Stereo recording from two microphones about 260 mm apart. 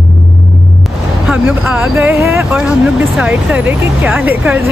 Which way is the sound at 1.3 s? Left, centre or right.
Centre.